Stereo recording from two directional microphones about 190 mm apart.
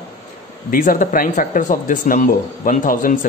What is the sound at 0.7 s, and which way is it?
A man's voice, 45° left (ahead or behind).